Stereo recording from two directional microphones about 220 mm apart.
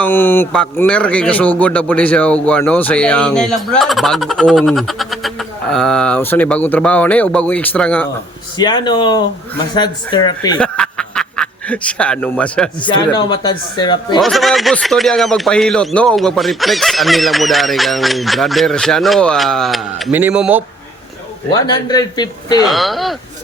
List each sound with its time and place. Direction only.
0.0 s a man's voice: 10° left (ahead or behind)
8.5 s speech: 20° left (ahead or behind)
10.6 s speech: 5° left (ahead or behind)
12.8 s speech: 20° left (ahead or behind)
14.2 s a man's voice: centre (ahead or behind)
21.5 s speech: 20° left (ahead or behind)
22.6 s a man's voice: centre (ahead or behind)